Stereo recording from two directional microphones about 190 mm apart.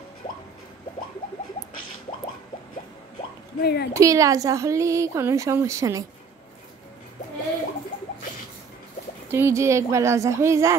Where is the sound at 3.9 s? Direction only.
15° right (ahead or behind).